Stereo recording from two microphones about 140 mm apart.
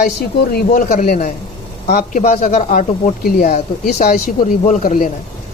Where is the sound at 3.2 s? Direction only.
90° left.